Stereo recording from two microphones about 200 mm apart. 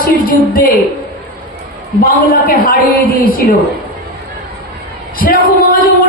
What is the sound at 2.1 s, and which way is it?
A woman's voice, 45° left (ahead or behind).